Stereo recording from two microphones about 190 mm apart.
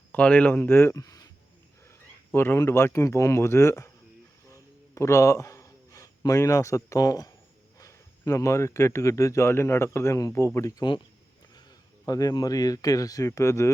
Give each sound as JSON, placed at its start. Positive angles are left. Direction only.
{"t": 0.1, "sound": "speech", "side_deg": 5}
{"t": 4.5, "sound": "a sound", "side_deg": 15}
{"t": 7.8, "sound": "speech", "side_deg": 15}
{"t": 12.0, "sound": "speech", "side_deg": 20}